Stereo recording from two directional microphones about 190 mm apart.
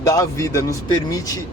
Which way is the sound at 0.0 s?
20° left (ahead or behind).